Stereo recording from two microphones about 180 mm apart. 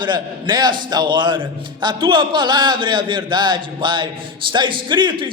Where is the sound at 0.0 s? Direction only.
25° right (ahead or behind).